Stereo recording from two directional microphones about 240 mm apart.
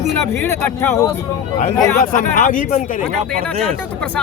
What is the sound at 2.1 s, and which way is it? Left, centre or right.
Speech, left.